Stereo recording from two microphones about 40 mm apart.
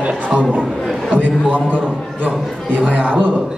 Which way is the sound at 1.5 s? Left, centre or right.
Left.